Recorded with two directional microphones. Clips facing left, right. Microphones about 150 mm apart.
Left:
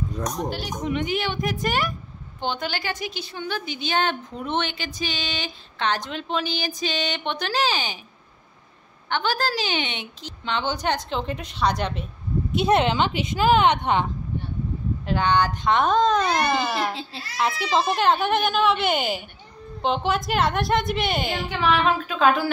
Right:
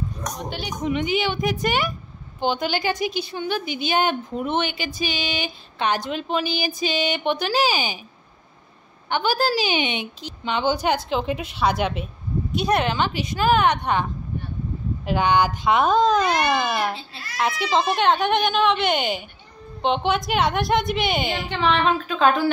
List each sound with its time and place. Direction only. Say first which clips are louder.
0.4 s a woman's voice: left 1 dB; centre (ahead or behind)
9.1 s a woman's voice: right 3 dB; 10° right (ahead or behind)
12.5 s a woman's voice: left 2 dB; 25° left (ahead or behind)
15.0 s a woman's voice: right 2 dB; 10° right (ahead or behind); by 22.5 s 5° left (ahead or behind)